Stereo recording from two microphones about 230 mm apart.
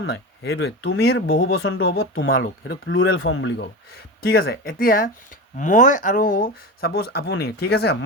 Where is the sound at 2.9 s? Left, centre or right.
Left.